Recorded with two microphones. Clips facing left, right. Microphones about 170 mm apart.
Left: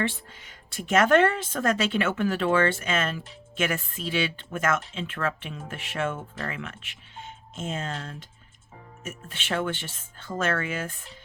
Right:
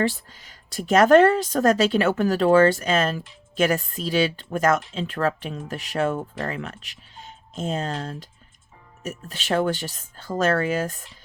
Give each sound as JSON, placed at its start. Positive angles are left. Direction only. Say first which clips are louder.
{"t": 0.0, "sound": "a woman's voice", "louder": "right 5 dB", "side_deg": -35}